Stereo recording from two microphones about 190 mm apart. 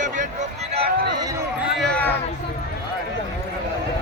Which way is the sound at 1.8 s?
5° left (ahead or behind).